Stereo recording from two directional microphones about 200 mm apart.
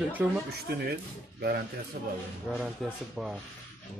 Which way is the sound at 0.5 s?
50° right (ahead or behind).